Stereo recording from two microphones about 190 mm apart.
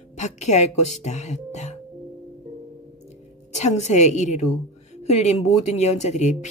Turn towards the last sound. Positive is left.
turn(degrees=35)  # may be behind; listen again after turning